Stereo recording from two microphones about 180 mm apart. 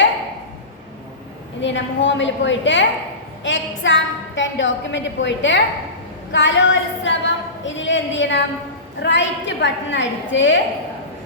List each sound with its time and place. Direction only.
1.6 s a woman's voice: 90° left